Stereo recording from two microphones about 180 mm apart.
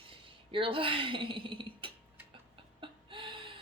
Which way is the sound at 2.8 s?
25° right (ahead or behind).